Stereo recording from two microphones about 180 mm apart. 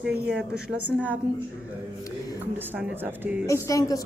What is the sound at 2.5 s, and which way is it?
Speech, 10° right (ahead or behind).